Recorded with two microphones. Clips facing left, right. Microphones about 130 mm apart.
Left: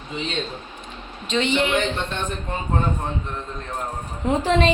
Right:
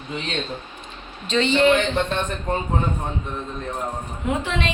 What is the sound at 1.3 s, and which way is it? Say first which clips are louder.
Speech: right 4 dB; 15° left (ahead or behind).